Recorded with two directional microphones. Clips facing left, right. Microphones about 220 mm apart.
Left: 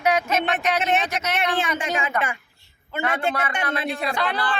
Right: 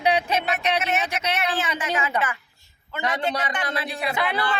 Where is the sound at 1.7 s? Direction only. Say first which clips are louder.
Left 1 dB; 30° left (ahead or behind).